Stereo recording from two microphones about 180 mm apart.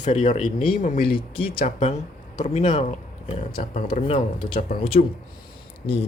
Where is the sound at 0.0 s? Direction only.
40° left (ahead or behind).